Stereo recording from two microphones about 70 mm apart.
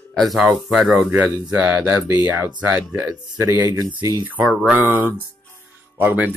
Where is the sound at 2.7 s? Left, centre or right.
Right.